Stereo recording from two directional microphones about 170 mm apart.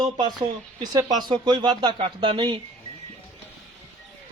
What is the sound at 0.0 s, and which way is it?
Speech, 25° right (ahead or behind).